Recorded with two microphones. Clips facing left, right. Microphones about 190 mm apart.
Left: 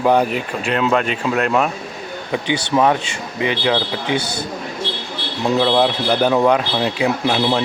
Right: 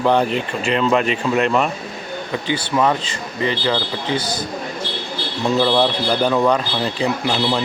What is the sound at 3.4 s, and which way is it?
Speech, 15° left (ahead or behind).